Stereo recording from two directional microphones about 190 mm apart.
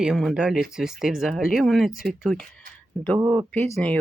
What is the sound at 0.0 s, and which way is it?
Speech, centre (ahead or behind).